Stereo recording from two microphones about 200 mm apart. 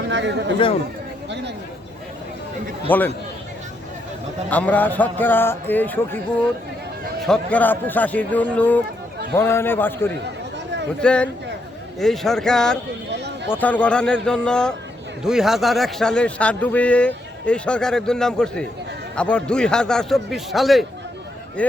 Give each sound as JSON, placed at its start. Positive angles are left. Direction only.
{"t": 0.1, "sound": "a man's voice", "side_deg": -60}
{"t": 2.9, "sound": "speech", "side_deg": 10}
{"t": 4.4, "sound": "speech", "side_deg": 5}
{"t": 7.2, "sound": "speech", "side_deg": 5}
{"t": 13.1, "sound": "a sound", "side_deg": -60}
{"t": 13.5, "sound": "speech", "side_deg": 10}